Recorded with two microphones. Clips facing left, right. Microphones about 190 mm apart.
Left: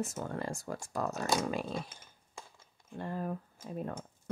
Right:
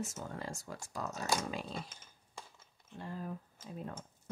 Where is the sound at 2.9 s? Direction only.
60° left (ahead or behind).